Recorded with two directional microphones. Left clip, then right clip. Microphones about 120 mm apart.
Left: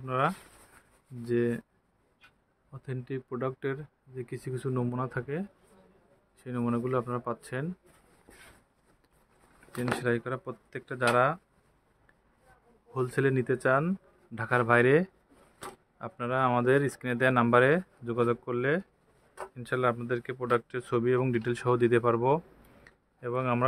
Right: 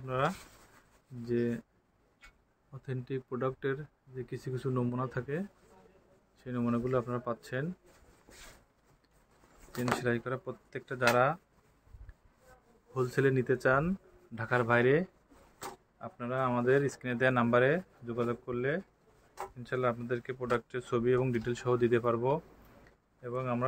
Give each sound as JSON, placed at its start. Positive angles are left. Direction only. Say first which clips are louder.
{"t": 0.0, "sound": "speech", "louder": "left 4 dB", "side_deg": 35}
{"t": 2.7, "sound": "speech", "louder": "left 1 dB", "side_deg": 25}
{"t": 9.9, "sound": "speech", "louder": "left 4 dB", "side_deg": 25}
{"t": 12.9, "sound": "speech", "louder": "left 1 dB", "side_deg": 25}
{"t": 16.6, "sound": "speech", "louder": "left 3 dB", "side_deg": 85}
{"t": 19.5, "sound": "speech", "louder": "left 4 dB", "side_deg": 70}